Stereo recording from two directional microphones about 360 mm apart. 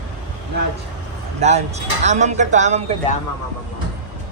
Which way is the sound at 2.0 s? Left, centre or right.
Centre.